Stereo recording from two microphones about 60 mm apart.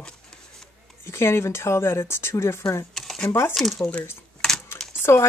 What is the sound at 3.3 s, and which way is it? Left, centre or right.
Dishes, left.